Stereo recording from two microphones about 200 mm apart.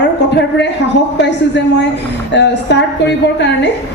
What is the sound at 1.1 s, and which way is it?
A woman's voice, 60° left (ahead or behind).